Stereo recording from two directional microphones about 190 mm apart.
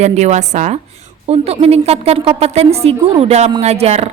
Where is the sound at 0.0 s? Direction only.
35° right (ahead or behind).